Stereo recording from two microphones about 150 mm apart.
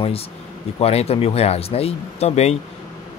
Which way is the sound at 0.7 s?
40° left (ahead or behind).